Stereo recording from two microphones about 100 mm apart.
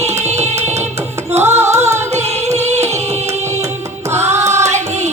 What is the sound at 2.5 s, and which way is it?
Music, 90° right.